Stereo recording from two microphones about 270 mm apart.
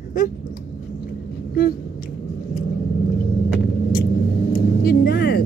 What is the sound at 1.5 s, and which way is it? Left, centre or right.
Speech, left.